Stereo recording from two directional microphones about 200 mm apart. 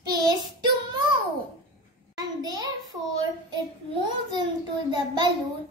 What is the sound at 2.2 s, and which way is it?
Child singing, 20° right (ahead or behind).